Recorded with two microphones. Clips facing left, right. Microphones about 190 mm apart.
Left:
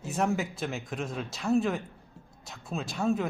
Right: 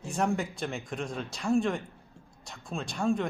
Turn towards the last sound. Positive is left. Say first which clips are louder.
# even
turn(degrees=5)  # may be behind; listen again after turning